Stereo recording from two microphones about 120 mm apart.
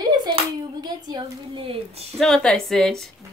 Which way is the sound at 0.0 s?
35° right (ahead or behind).